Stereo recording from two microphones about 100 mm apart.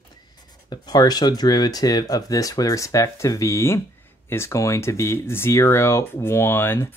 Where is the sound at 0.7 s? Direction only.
45° left (ahead or behind).